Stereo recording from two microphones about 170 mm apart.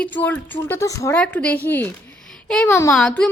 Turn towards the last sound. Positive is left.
turn(degrees=5)  # may be behind; listen again after turning